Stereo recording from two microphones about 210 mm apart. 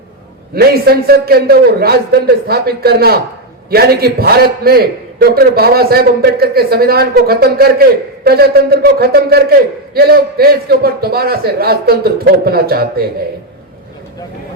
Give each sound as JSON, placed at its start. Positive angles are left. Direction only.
{"t": 0.5, "sound": "a man's voice", "side_deg": -50}